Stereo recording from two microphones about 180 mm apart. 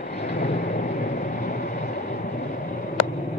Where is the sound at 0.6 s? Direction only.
50° left (ahead or behind).